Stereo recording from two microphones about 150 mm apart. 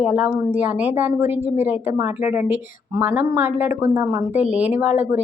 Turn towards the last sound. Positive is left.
turn(degrees=-15)  # may be behind; listen again after turning